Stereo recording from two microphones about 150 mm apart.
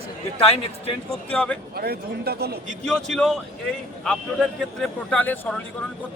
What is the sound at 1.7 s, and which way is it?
Speech, 90° right.